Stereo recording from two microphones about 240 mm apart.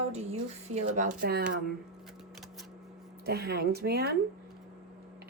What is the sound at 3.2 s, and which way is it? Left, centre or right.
Speech, right.